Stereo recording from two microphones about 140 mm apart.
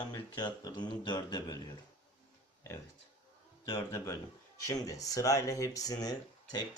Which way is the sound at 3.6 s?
25° left (ahead or behind).